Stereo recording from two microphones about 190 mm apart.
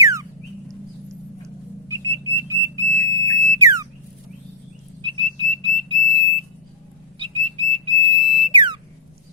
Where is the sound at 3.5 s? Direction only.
15° right (ahead or behind).